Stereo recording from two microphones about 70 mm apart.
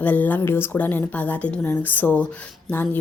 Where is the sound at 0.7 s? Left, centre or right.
Left.